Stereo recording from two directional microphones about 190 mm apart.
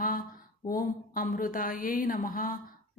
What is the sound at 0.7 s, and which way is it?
Speech, 45° left (ahead or behind).